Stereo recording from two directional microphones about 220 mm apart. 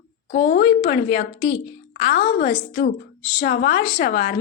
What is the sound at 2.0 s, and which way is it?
A woman's voice, 35° left (ahead or behind).